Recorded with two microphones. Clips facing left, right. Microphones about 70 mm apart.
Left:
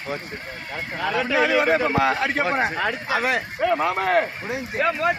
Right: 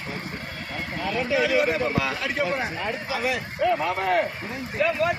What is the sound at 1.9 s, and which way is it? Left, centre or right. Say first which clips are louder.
A man's voice: left 6 dB; left.